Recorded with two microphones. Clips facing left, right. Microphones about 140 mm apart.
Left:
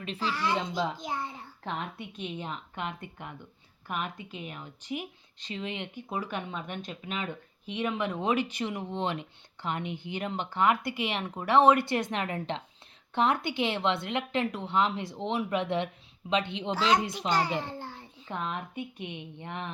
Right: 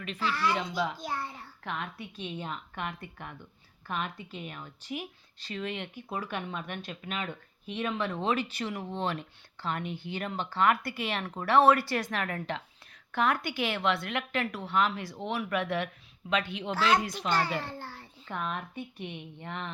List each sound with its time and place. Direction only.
0.0 s speech: 30° left (ahead or behind)
0.3 s a child's voice: 15° left (ahead or behind)